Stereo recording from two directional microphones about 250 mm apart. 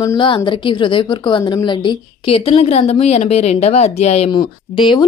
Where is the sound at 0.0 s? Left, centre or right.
Centre.